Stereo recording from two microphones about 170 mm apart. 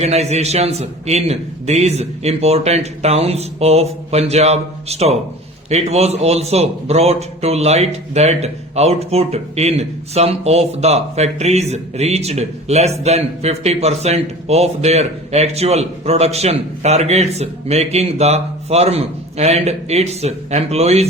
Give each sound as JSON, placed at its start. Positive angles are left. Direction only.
{"t": 0.0, "sound": "a man's voice", "side_deg": -40}